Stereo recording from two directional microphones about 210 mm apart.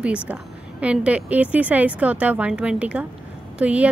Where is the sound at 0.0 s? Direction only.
5° right (ahead or behind).